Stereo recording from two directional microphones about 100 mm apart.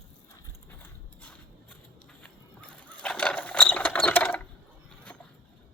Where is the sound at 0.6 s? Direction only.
15° left (ahead or behind).